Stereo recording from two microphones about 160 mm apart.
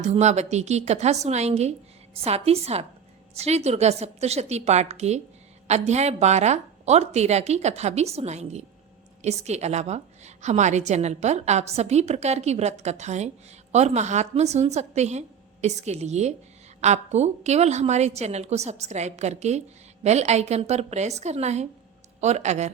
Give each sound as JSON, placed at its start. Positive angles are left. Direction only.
{"t": 0.0, "sound": "a woman's voice", "side_deg": -45}